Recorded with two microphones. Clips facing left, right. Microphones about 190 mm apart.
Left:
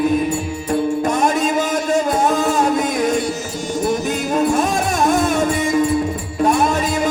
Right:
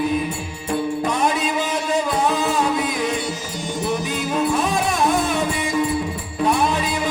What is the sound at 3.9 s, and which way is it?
Music, 45° left (ahead or behind).